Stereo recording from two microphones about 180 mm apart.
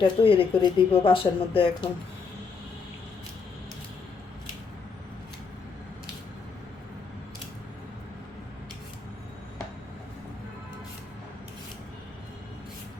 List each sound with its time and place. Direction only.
0.0 s speech: 30° left (ahead or behind)